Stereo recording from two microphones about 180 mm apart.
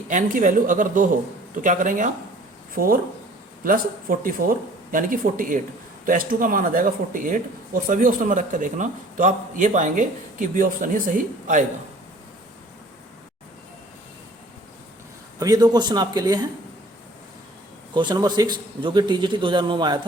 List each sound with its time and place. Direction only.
0.1 s speech: 45° right (ahead or behind)
15.4 s a man's voice: 20° right (ahead or behind)
17.9 s a man's voice: 25° right (ahead or behind)